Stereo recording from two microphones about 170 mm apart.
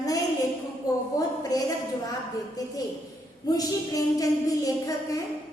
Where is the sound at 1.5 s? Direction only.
20° left (ahead or behind).